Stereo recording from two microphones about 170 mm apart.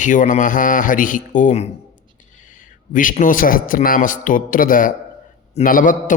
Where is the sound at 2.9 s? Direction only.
50° left (ahead or behind).